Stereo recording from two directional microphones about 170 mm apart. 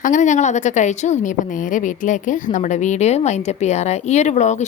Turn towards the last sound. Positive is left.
turn(degrees=45)  # may be behind; listen again after turning